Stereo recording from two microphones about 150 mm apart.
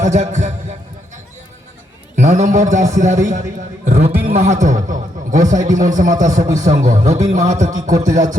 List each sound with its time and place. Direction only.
0.0 s a man's voice: 50° right (ahead or behind)
2.1 s a man's voice: 55° right (ahead or behind)
3.8 s a sound: 50° right (ahead or behind)
4.2 s a man's voice: 45° right (ahead or behind)